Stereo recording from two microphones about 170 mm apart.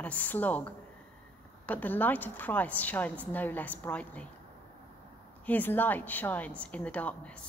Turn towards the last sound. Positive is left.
turn(degrees=5)  # may be behind; listen again after turning